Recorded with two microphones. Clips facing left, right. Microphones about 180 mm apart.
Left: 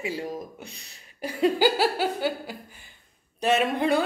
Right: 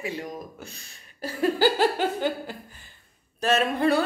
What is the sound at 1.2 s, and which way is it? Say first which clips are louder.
A woman's voice: left 1 dB; 15° left (ahead or behind).